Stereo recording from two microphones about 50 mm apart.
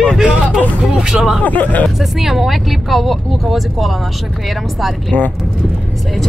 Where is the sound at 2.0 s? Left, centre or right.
Centre.